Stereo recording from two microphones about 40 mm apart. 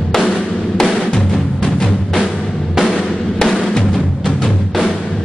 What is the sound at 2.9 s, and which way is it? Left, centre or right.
Music, centre.